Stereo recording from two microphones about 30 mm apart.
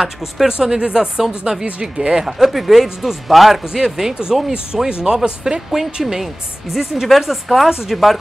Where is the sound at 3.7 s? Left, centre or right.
Centre.